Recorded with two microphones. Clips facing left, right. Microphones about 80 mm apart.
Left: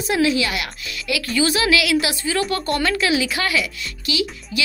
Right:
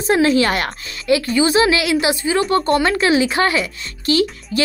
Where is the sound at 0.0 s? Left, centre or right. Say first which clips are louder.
Right 5 dB; right.